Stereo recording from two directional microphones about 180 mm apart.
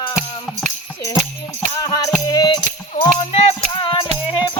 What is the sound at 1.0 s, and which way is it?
Music, 15° left (ahead or behind).